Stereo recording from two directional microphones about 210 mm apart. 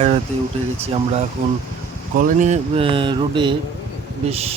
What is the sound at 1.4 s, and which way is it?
Speech, 40° right (ahead or behind).